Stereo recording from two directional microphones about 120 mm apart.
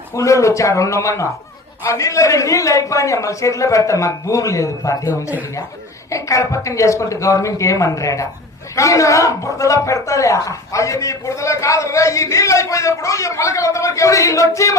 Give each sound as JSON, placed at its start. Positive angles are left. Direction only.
{"t": 0.2, "sound": "a man's voice", "side_deg": 25}